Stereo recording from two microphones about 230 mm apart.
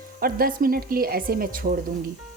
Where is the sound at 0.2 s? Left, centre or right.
Right.